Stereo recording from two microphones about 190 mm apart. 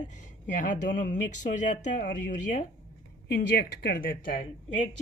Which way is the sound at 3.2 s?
55° left (ahead or behind).